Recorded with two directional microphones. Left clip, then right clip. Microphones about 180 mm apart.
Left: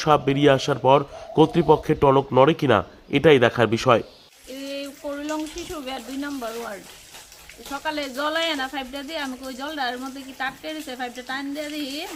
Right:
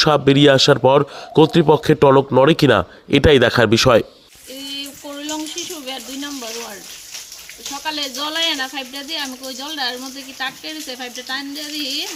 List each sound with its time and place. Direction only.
0.0 s speech: 40° right (ahead or behind)
5.3 s a sound: 5° left (ahead or behind)
7.9 s speech: 5° left (ahead or behind)